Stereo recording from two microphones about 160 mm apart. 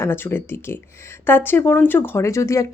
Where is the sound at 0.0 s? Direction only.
15° left (ahead or behind).